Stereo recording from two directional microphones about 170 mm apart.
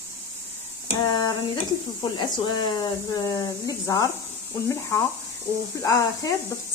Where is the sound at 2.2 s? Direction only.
25° left (ahead or behind).